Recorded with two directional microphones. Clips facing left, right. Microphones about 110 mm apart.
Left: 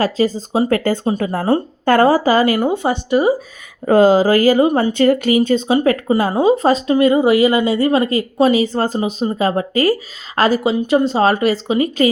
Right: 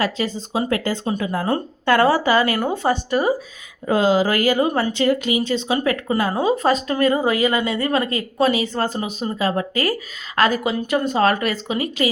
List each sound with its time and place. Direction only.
0.0 s speech: 35° left (ahead or behind)
2.6 s speech: 15° left (ahead or behind)
3.8 s speech: 45° left (ahead or behind)
4.8 s speech: 50° left (ahead or behind)
5.6 s speech: 35° left (ahead or behind)
6.9 s speech: 20° left (ahead or behind)
7.4 s speech: 35° left (ahead or behind)